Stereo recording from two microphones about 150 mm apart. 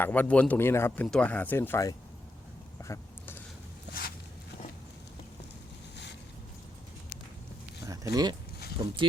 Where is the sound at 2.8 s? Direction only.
15° left (ahead or behind).